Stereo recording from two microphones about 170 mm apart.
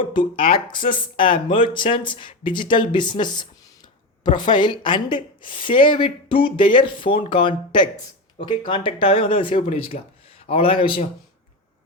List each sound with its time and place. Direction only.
0.5 s a woman's voice: 30° left (ahead or behind)